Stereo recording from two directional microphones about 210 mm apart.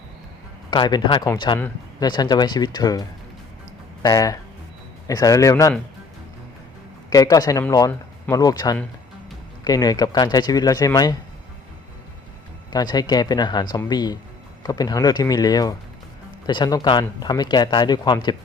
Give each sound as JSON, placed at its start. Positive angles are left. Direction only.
{"t": 0.7, "sound": "speech", "side_deg": 20}
{"t": 1.5, "sound": "speech", "side_deg": 10}
{"t": 2.0, "sound": "speech", "side_deg": 20}
{"t": 4.0, "sound": "speech", "side_deg": 15}
{"t": 7.1, "sound": "speech", "side_deg": 15}
{"t": 12.7, "sound": "speech", "side_deg": 20}